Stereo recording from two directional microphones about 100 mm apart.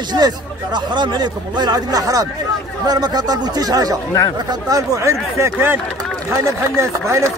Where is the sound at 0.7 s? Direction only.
50° right (ahead or behind); by 7.2 s 30° right (ahead or behind).